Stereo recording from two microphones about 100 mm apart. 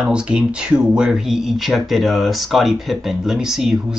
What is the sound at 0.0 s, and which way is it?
Speech, 10° right (ahead or behind).